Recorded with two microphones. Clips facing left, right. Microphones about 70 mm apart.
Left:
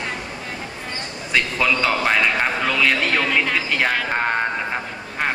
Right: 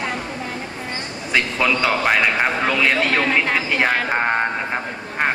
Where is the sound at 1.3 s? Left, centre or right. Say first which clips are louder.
Right 1 dB; centre.